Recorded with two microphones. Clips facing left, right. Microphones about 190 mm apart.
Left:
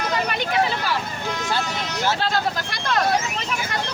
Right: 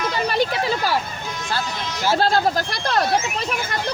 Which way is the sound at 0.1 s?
35° right (ahead or behind).